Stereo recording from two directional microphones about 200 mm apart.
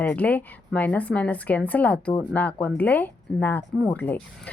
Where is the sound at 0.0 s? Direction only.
5° left (ahead or behind).